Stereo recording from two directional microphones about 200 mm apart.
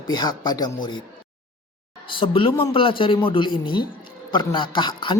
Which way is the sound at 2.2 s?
25° left (ahead or behind).